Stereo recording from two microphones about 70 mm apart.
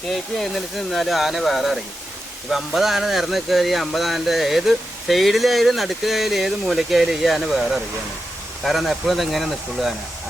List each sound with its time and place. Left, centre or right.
0.1 s speech: centre